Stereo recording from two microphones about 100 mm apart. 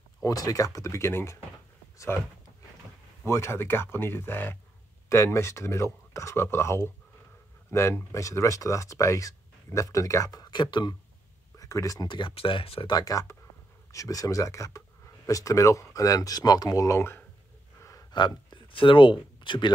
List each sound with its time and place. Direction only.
0.2 s speech: 35° left (ahead or behind)
3.3 s speech: 25° left (ahead or behind); by 11.0 s 45° left (ahead or behind)
11.5 s a sound: 35° left (ahead or behind)
12.1 s speech: 60° left (ahead or behind)
12.9 s speech: 35° left (ahead or behind)
18.1 s speech: 50° left (ahead or behind)